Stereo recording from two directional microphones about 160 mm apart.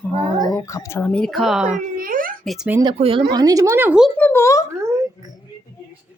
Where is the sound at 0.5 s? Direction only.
20° left (ahead or behind); by 1.6 s centre (ahead or behind).